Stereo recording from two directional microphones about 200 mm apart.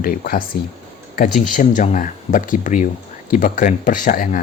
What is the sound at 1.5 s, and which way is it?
Speech, 40° left (ahead or behind).